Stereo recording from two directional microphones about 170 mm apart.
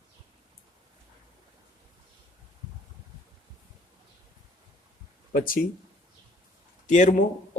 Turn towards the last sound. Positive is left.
turn(degrees=45)  # may be behind; listen again after turning